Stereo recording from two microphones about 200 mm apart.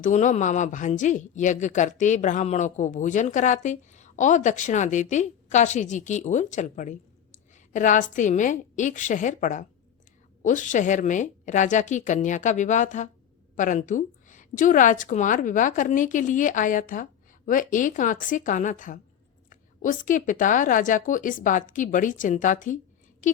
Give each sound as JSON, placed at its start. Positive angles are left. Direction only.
{"t": 0.0, "sound": "a woman's voice", "side_deg": 35}